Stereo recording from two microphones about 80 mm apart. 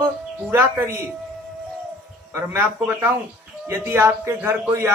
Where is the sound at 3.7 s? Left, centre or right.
Right.